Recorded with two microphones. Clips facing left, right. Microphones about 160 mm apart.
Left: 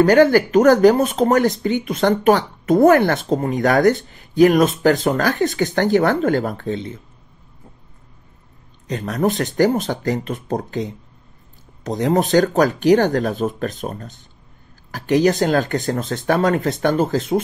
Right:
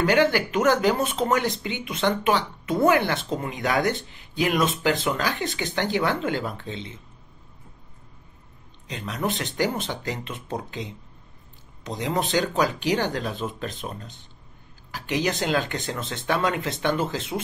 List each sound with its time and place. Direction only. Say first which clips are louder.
0.0 s speech: left 8 dB; 45° left (ahead or behind)
8.8 s speech: left 8 dB; 45° left (ahead or behind)